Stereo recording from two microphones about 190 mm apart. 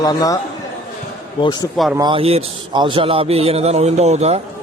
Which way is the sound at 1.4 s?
25° left (ahead or behind).